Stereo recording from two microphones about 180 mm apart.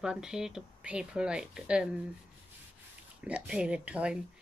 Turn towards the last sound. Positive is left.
turn(degrees=-5)  # may be behind; listen again after turning